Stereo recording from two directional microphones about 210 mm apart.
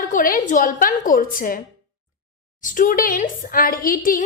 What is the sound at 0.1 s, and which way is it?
Speech, 40° left (ahead or behind).